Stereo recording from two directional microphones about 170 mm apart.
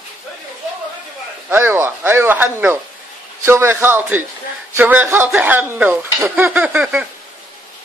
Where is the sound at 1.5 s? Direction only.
15° right (ahead or behind).